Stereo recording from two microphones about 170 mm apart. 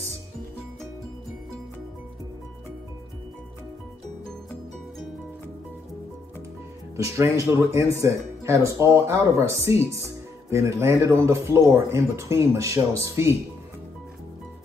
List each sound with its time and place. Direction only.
7.0 s speech: 15° right (ahead or behind)